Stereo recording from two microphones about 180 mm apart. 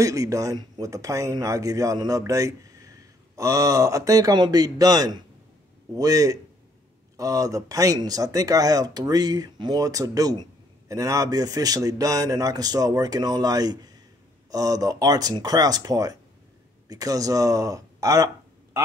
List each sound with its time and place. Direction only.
0.0 s speech: 20° right (ahead or behind)